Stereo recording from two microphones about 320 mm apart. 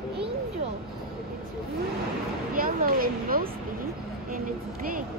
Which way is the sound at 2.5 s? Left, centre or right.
Right.